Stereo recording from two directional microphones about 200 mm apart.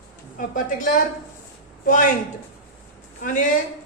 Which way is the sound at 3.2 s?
40° left (ahead or behind).